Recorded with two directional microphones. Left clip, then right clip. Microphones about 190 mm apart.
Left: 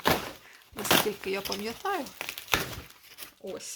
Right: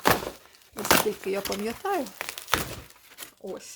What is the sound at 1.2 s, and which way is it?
Speech, 35° right (ahead or behind).